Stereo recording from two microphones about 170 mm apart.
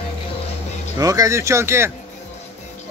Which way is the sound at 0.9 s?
20° right (ahead or behind).